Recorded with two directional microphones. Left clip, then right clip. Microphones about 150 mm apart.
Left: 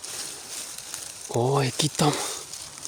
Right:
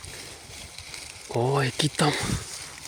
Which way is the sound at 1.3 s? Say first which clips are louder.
Left 1 dB; 20° left (ahead or behind).